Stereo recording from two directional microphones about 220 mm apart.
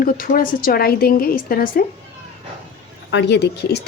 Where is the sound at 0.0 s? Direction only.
40° left (ahead or behind).